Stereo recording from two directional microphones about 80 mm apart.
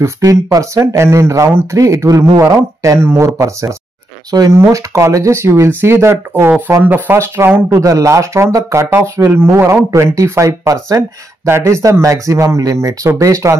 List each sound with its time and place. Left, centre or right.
0.0 s speech: right
7.7 s speech: right